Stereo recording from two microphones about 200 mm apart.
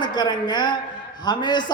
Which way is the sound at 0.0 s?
20° left (ahead or behind).